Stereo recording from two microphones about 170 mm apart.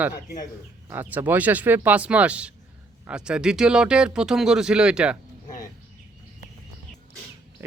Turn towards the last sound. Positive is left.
turn(degrees=-15)  # may be behind; listen again after turning